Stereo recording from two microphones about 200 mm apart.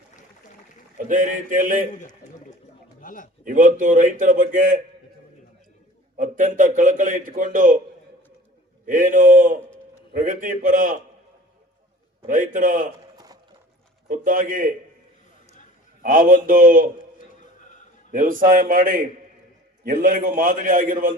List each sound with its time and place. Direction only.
0.9 s a man's voice: 40° right (ahead or behind)
3.0 s a sound: 40° left (ahead or behind)
3.4 s a man's voice: 40° right (ahead or behind)
6.1 s a man's voice: 40° right (ahead or behind)
8.9 s a man's voice: 40° right (ahead or behind)
9.6 s a sound: 5° left (ahead or behind)
10.1 s a man's voice: 40° right (ahead or behind)
12.2 s a man's voice: 40° right (ahead or behind)
13.1 s a sound: 20° right (ahead or behind)
14.1 s a man's voice: 40° right (ahead or behind)
16.0 s a man's voice: 40° right (ahead or behind)
17.2 s a sound: 40° left (ahead or behind)
18.1 s a man's voice: 40° right (ahead or behind)